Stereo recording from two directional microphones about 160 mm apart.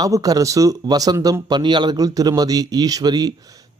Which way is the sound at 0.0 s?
20° right (ahead or behind).